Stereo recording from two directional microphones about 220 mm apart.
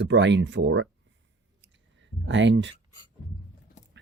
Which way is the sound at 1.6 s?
55° right (ahead or behind).